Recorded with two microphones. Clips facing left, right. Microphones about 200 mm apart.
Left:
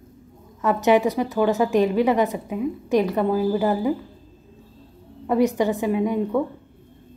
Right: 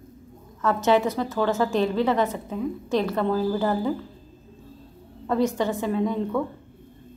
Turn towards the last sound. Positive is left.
turn(degrees=15)  # may be behind; listen again after turning